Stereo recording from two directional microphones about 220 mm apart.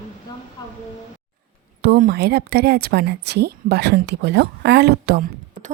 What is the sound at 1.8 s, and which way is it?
Speech, 45° right (ahead or behind).